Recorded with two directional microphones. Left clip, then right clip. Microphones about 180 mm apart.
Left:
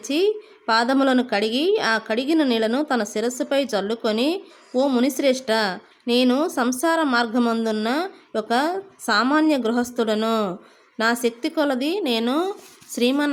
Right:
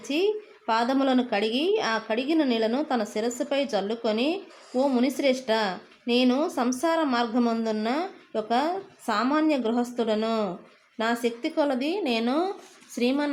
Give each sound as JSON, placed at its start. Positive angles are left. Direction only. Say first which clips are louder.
{"t": 0.0, "sound": "a woman's voice", "louder": "left 4 dB", "side_deg": 20}